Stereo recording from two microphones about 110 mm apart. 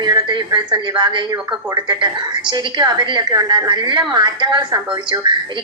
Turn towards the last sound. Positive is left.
turn(degrees=-45)  # may be behind; listen again after turning